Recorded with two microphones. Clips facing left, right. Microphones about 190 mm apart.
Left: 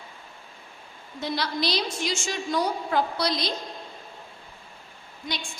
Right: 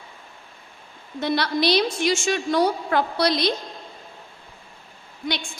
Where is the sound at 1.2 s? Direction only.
65° right (ahead or behind).